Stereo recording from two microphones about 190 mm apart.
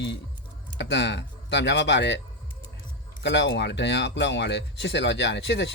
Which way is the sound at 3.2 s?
70° left (ahead or behind).